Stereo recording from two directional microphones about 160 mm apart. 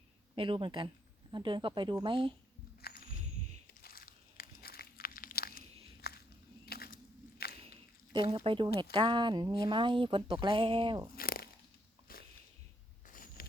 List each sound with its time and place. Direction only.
0.3 s speech: 30° right (ahead or behind)
2.8 s a sound: 70° left (ahead or behind)
3.8 s crumpling: 70° left (ahead or behind)
6.7 s walk: 70° left (ahead or behind)
7.6 s a sound: 35° right (ahead or behind)
8.4 s speech: 30° right (ahead or behind)
11.1 s crunch: 65° left (ahead or behind)
12.1 s walk: 65° left (ahead or behind)
13.1 s a sound: 60° left (ahead or behind)